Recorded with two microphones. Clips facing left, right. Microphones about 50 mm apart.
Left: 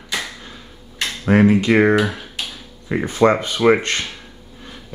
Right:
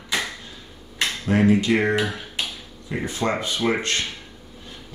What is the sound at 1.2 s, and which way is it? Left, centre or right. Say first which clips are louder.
A man's voice: left 5 dB; left.